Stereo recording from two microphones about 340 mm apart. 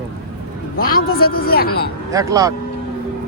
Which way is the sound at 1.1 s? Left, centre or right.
Left.